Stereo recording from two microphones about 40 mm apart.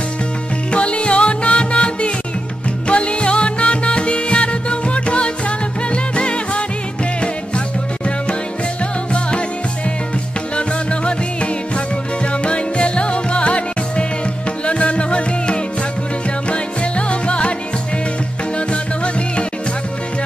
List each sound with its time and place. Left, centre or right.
0.7 s music: left
10.5 s music: left
18.7 s music: left